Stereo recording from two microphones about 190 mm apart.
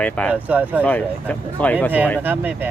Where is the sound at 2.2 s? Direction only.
10° right (ahead or behind).